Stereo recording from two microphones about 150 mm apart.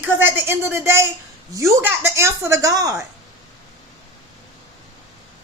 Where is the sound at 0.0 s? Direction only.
15° right (ahead or behind).